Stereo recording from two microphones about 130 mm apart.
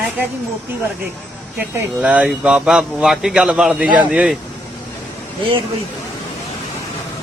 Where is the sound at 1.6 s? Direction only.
10° right (ahead or behind).